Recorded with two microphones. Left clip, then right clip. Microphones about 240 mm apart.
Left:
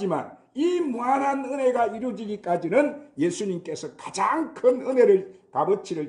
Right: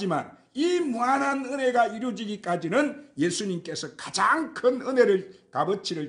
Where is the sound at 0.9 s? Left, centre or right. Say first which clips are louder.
Left 1 dB; right.